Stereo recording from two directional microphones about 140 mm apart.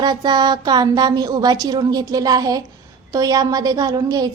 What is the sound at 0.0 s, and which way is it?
A woman's voice, 30° right (ahead or behind).